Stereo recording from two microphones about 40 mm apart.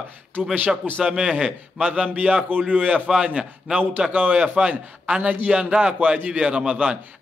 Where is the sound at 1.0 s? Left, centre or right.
Right.